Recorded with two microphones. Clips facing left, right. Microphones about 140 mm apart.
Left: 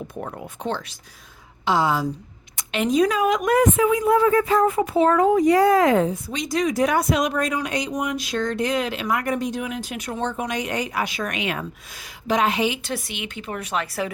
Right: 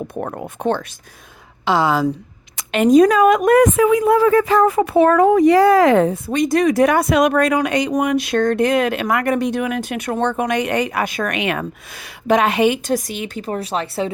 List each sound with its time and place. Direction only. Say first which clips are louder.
0.1 s a woman's voice: right 6 dB; 55° right (ahead or behind)
1.6 s a woman's voice: right 4 dB; 85° right
2.7 s a woman's voice: right 8 dB; 50° right (ahead or behind); by 14.1 s 30° right (ahead or behind)